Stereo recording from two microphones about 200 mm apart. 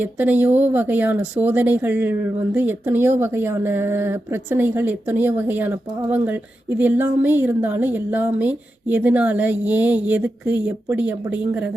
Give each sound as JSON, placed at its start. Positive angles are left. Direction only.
{"t": 0.0, "sound": "speech", "side_deg": -10}